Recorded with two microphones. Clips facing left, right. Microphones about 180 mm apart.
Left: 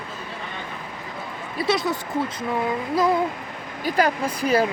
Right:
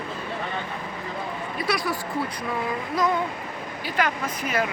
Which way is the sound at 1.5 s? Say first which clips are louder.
Left 5 dB; 25° left (ahead or behind).